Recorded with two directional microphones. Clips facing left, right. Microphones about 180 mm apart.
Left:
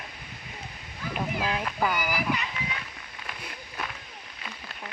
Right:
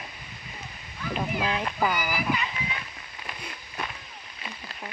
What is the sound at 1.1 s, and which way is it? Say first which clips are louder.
Speech: right 1 dB; 5° left (ahead or behind).